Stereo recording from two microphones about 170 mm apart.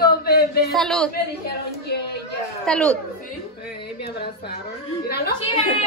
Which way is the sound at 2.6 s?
5° left (ahead or behind).